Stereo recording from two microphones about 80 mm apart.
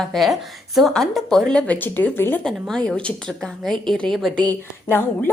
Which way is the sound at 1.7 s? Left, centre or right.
Left.